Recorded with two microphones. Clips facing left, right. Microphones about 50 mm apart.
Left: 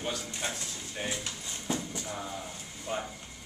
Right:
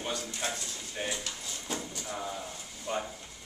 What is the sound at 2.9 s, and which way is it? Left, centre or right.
Speech, centre.